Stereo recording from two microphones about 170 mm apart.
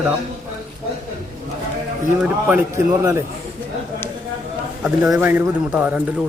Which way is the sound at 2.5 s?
15° right (ahead or behind).